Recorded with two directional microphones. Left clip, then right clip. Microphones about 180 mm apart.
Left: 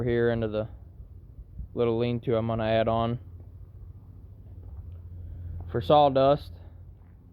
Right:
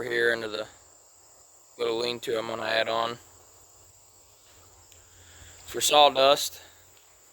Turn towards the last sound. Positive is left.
turn(degrees=-25)  # may be behind; listen again after turning